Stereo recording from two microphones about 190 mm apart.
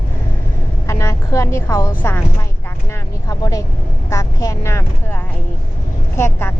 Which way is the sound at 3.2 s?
20° left (ahead or behind).